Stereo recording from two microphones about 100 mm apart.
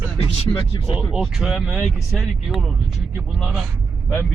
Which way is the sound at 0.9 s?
5° right (ahead or behind).